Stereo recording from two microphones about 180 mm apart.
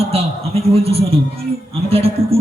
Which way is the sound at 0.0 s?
35° right (ahead or behind).